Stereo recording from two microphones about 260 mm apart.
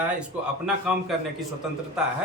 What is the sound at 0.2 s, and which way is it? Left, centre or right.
A man's voice, centre.